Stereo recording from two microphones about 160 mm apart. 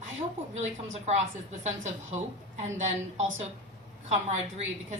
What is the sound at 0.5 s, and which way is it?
A woman's voice, 45° right (ahead or behind).